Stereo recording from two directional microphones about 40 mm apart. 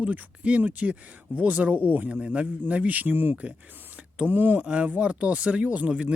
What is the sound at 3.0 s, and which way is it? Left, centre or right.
Speech, right.